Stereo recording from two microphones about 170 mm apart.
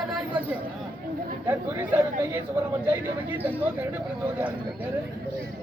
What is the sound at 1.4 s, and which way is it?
Speech, 10° right (ahead or behind).